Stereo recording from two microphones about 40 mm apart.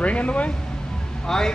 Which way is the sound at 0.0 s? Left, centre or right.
Left.